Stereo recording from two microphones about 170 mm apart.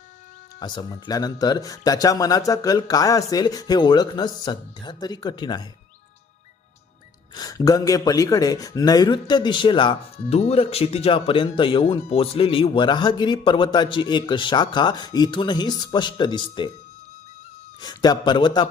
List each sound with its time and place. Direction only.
0.6 s speech: 25° left (ahead or behind)
7.3 s speech: 20° left (ahead or behind)
17.7 s speech: 25° left (ahead or behind)